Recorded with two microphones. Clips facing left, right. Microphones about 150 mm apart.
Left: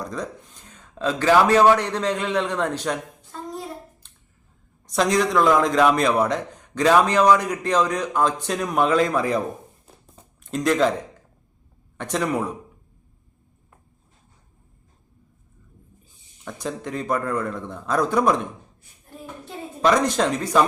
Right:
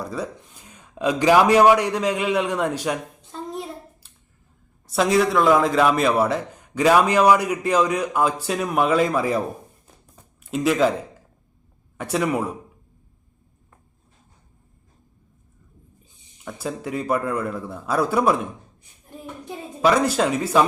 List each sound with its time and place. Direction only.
0.0 s a man's voice: 10° right (ahead or behind)
4.0 s a sound: 5° right (ahead or behind)
4.9 s a man's voice: 5° right (ahead or behind)
10.4 s speech: 5° right (ahead or behind)
11.9 s a man's voice: 5° right (ahead or behind)
16.4 s a man's voice: 5° right (ahead or behind)
18.8 s child singing: 15° right (ahead or behind)
19.8 s a man's voice: 5° right (ahead or behind)